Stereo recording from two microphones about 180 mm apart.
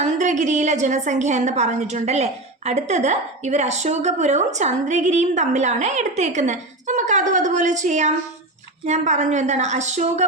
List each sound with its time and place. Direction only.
0.0 s a woman's voice: 40° right (ahead or behind)